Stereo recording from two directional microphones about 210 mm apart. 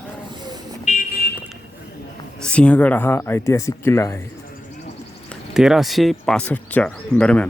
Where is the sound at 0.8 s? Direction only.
35° left (ahead or behind).